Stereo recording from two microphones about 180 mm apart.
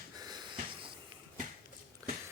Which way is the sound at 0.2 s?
25° right (ahead or behind).